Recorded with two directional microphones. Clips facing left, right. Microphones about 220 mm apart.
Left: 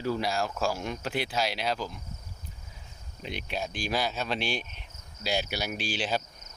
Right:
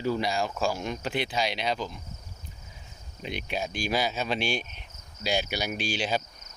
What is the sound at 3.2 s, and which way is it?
Speech, centre (ahead or behind).